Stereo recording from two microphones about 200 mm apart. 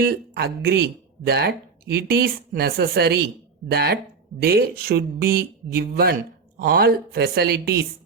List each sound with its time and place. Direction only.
0.0 s speech: 50° right (ahead or behind)